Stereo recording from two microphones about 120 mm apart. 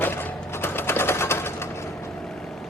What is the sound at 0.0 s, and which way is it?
Sewing machine, 20° left (ahead or behind).